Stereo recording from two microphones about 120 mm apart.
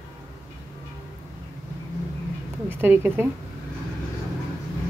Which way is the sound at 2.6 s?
15° right (ahead or behind).